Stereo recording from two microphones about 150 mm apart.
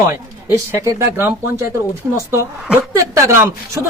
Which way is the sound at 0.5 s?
20° right (ahead or behind).